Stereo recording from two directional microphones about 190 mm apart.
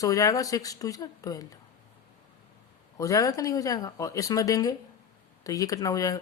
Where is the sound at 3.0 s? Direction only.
15° left (ahead or behind).